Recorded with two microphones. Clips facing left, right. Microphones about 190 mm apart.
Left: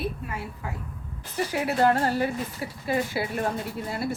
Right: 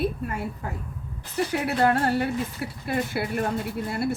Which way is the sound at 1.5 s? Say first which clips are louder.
Left 1 dB; 60° right (ahead or behind).